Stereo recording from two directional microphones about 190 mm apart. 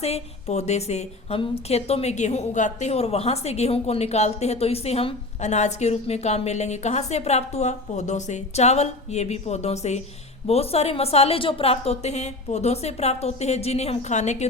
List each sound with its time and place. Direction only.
0.0 s a woman's voice: 35° left (ahead or behind)